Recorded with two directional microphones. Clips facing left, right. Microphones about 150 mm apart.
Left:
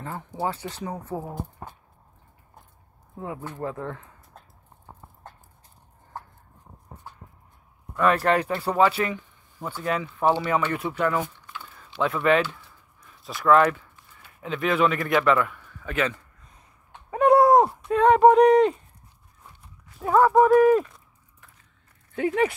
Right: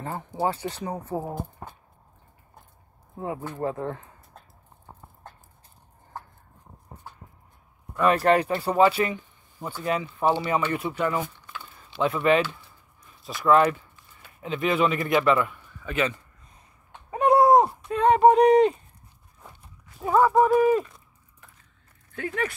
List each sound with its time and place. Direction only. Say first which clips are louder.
0.4 s speech: right 2 dB; 15° right (ahead or behind)
3.6 s speech: right 3 dB; 25° right (ahead or behind)
8.0 s speech: right 1 dB; 15° right (ahead or behind)
13.2 s speech: even; 5° left (ahead or behind)
13.5 s speech: left 1 dB; 15° right (ahead or behind)
17.1 s a sound: left 1 dB; 10° right (ahead or behind)
17.8 s clip-clop: left 2 dB; 75° left (ahead or behind)
18.4 s speech: left 1 dB; 10° right (ahead or behind)
20.0 s speech: left 2 dB; 5° right (ahead or behind)
22.1 s speech: left 7 dB; 20° left (ahead or behind)